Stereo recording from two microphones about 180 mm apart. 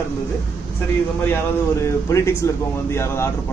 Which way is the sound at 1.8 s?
15° left (ahead or behind).